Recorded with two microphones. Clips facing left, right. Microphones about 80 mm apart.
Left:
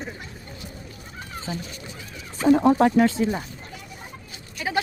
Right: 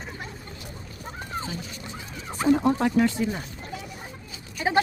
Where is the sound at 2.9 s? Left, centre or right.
Left.